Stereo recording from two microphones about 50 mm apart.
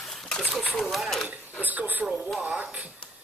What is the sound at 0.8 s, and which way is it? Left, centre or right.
Speech, centre.